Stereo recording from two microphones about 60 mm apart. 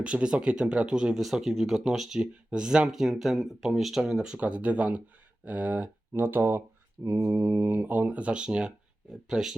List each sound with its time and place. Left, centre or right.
0.0 s speech: centre
4.4 s speech: right
6.1 s speech: right; by 9.6 s centre